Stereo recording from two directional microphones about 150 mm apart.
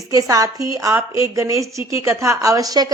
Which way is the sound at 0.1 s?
25° right (ahead or behind).